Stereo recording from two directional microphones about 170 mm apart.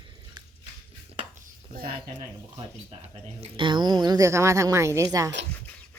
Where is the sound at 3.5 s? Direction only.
30° right (ahead or behind).